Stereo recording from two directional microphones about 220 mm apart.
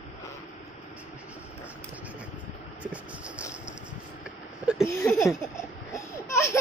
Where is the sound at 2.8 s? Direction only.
5° right (ahead or behind).